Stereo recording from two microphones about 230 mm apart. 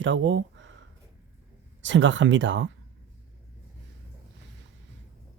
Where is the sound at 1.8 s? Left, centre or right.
Right.